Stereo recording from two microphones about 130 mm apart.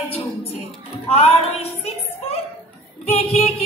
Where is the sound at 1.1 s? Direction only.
50° left (ahead or behind).